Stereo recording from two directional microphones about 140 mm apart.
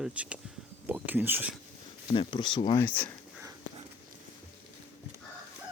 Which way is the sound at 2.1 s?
35° left (ahead or behind).